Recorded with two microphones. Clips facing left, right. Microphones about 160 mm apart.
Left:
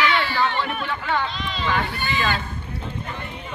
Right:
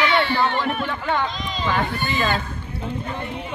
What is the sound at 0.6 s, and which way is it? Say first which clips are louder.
Speech: right 2 dB; 45° right (ahead or behind).